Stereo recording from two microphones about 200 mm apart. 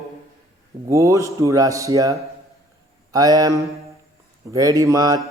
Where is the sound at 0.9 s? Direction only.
15° right (ahead or behind).